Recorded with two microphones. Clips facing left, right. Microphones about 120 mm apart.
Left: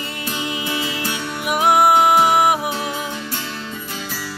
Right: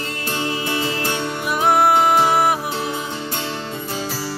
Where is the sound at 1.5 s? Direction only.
10° left (ahead or behind).